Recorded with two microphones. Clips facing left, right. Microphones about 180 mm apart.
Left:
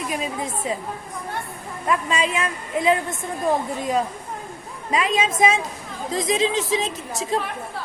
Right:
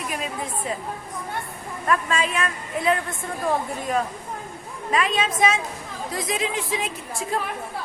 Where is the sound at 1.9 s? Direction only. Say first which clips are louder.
Left 1 dB; 20° left (ahead or behind).